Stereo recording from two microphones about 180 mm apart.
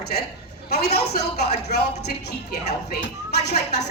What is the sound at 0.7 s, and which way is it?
Speech, 60° left (ahead or behind).